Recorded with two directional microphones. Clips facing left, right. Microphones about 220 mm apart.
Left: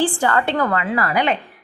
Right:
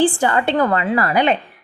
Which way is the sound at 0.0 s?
15° right (ahead or behind).